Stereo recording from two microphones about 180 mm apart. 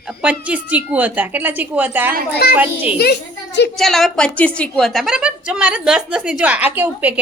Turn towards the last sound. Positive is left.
turn(degrees=-10)  # may be behind; listen again after turning